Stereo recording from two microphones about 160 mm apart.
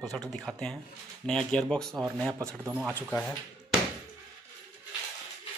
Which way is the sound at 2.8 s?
10° left (ahead or behind).